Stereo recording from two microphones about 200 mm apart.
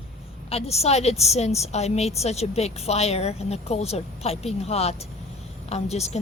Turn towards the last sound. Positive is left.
turn(degrees=30)  # may be behind; listen again after turning